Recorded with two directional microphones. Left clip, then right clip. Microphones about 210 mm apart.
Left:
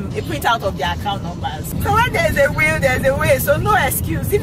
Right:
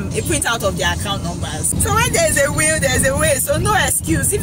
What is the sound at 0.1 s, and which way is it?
Speech, 5° right (ahead or behind).